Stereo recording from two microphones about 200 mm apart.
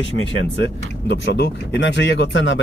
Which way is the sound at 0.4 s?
65° left (ahead or behind).